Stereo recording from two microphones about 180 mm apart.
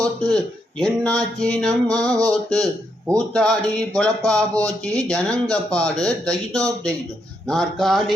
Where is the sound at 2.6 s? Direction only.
20° right (ahead or behind).